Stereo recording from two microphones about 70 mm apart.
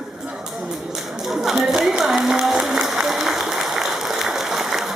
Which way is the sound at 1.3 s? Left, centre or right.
Centre.